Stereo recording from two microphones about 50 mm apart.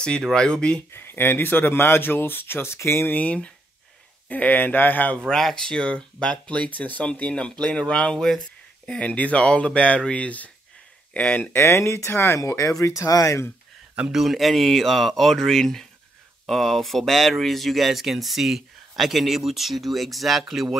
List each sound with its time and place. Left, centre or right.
0.2 s speech: centre
0.9 s speech: left
3.1 s speech: left
5.3 s speech: centre; by 11.5 s left
11.5 s speech: left
12.4 s speech: left
14.1 s speech: centre